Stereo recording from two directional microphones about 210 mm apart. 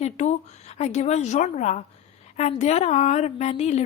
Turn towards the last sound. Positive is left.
turn(degrees=30)  # may be behind; listen again after turning